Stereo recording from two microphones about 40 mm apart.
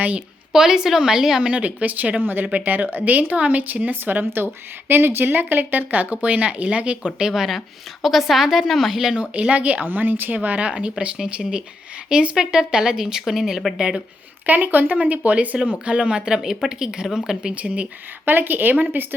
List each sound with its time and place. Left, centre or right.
0.5 s speech: centre
1.4 s speech: right
2.2 s speech: right
2.5 s speech: right
4.9 s speech: right
5.3 s speech: right
7.3 s speech: centre
9.3 s speech: right
9.8 s speech: right
10.7 s speech: right
14.4 s speech: right
15.8 s speech: right
17.5 s speech: right
18.3 s speech: right